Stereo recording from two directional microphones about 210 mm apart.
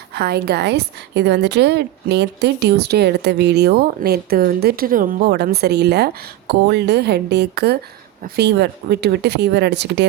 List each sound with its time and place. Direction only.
0.1 s a woman's voice: 50° right (ahead or behind)